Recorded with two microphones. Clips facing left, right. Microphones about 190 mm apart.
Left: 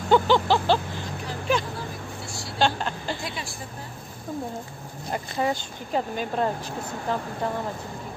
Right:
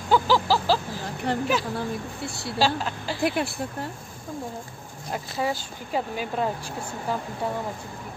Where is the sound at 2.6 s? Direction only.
5° right (ahead or behind).